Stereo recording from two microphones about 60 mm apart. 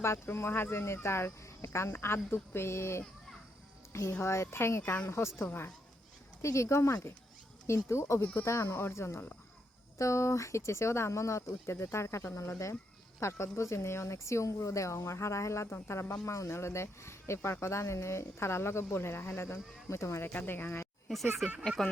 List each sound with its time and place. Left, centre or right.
0.0 s speech: left
4.2 s speech: left
5.5 s speech: left
6.4 s speech: left
20.3 s speech: left
21.6 s speech: centre